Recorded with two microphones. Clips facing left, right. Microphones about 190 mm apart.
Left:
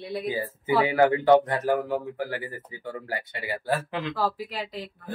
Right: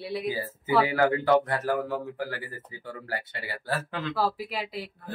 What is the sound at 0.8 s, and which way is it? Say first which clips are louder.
A man's voice: left 6 dB; 20° left (ahead or behind).